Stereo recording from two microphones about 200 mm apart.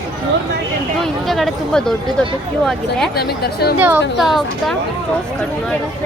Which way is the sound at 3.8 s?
5° right (ahead or behind).